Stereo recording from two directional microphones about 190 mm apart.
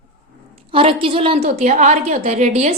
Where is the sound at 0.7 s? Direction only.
30° right (ahead or behind).